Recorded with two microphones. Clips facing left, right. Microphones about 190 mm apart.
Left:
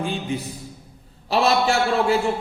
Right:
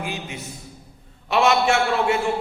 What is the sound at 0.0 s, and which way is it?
A man's voice, 30° left (ahead or behind).